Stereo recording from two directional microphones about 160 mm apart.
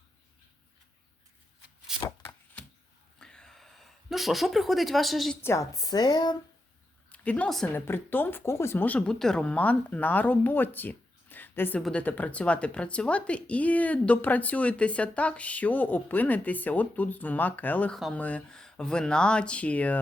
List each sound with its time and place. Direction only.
2.0 s chopping: 20° left (ahead or behind)
3.2 s a sound: 5° left (ahead or behind)
5.4 s speech: 20° left (ahead or behind)
7.1 s speech: 10° left (ahead or behind)